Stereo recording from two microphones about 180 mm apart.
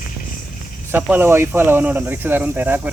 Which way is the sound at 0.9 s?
10° right (ahead or behind).